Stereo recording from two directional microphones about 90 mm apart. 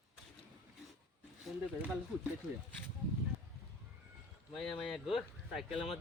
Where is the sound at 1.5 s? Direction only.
Centre (ahead or behind).